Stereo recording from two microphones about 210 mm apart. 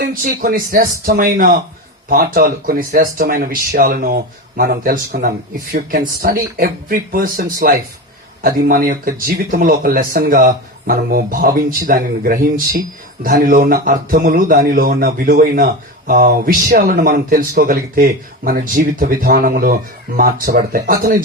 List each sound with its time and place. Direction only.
0.0 s speech: 40° right (ahead or behind)